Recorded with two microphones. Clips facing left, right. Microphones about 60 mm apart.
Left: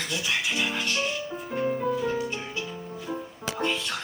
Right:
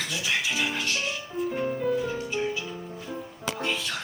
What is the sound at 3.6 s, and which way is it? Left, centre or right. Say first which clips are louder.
Speech: left 3 dB; centre.